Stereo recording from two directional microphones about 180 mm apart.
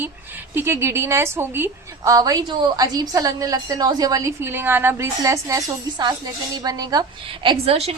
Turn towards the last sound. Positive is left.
turn(degrees=-35)  # may be behind; listen again after turning